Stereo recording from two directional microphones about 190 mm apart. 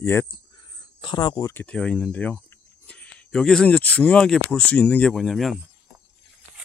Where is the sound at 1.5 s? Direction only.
5° left (ahead or behind).